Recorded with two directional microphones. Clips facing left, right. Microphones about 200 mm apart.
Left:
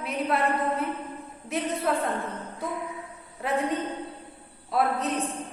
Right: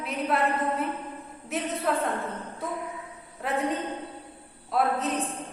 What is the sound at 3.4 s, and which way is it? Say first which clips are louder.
A woman's voice: left 1 dB; centre (ahead or behind).